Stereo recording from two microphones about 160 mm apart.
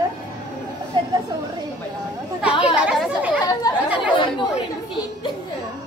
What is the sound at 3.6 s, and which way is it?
Chatter, 25° left (ahead or behind).